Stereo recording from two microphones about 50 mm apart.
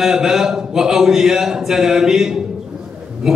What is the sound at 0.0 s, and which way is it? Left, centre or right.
A man's voice, centre.